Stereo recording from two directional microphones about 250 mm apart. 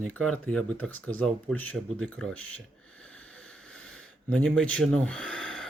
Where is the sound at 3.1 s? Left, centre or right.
Centre.